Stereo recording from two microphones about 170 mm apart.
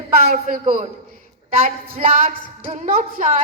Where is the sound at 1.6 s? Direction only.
55° right (ahead or behind).